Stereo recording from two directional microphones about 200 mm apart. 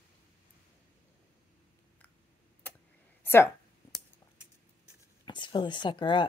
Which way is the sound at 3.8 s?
Centre (ahead or behind).